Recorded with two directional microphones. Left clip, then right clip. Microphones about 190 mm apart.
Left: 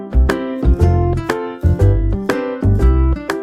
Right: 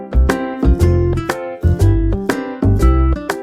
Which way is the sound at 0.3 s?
Centre (ahead or behind).